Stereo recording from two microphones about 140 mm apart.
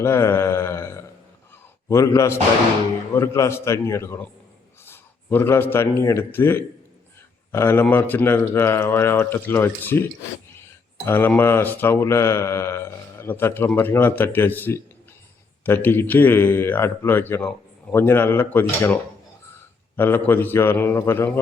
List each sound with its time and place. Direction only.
0.0 s mantra: 20° left (ahead or behind)
1.9 s a man's voice: 20° left (ahead or behind)
20.0 s speech: 15° left (ahead or behind)